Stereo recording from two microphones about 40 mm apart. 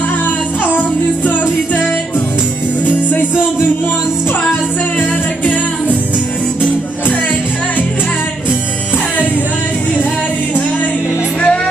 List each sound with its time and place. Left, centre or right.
0.7 s music: left
2.9 s music: left
5.4 s music: left
11.4 s music: centre